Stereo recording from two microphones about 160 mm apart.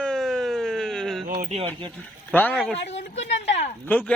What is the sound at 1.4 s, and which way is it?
Speech, 40° right (ahead or behind).